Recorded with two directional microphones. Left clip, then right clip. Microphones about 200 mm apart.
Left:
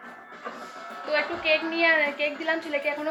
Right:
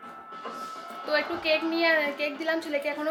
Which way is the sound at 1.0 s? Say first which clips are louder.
Left 2 dB; 25° right (ahead or behind).